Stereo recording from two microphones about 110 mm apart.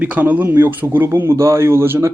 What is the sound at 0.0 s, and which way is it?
Speech, 15° right (ahead or behind).